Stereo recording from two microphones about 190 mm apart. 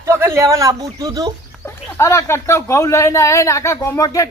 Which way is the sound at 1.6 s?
15° left (ahead or behind).